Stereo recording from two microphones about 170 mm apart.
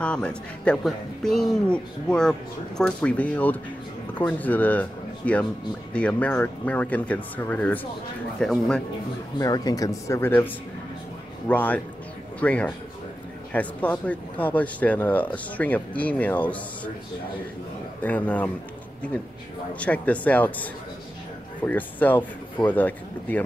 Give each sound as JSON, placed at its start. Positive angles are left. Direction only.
{"t": 0.0, "sound": "a man's voice", "side_deg": 5}
{"t": 9.4, "sound": "speech", "side_deg": 20}
{"t": 18.0, "sound": "speech", "side_deg": 10}
{"t": 19.7, "sound": "speech", "side_deg": 10}